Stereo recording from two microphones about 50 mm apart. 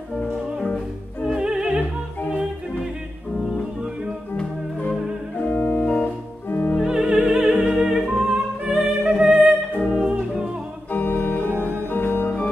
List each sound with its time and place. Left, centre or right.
1.2 s music: centre
5.4 s music: left
6.9 s music: centre
7.7 s music: centre
8.2 s music: centre
9.8 s music: centre
10.9 s organ: left